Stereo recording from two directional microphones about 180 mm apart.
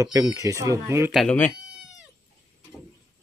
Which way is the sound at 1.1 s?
Centre (ahead or behind).